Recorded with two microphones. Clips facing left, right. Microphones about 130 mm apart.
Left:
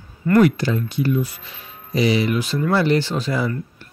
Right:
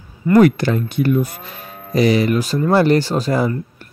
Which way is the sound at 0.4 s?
55° right (ahead or behind).